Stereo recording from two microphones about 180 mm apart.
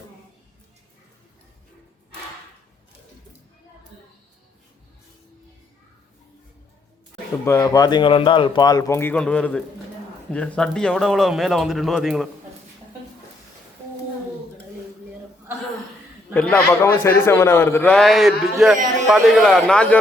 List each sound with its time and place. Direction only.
7.4 s speech: 15° left (ahead or behind); by 12.3 s centre (ahead or behind)
16.3 s a man's voice: 5° left (ahead or behind)